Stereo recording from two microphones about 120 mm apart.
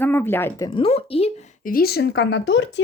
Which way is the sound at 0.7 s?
50° left (ahead or behind).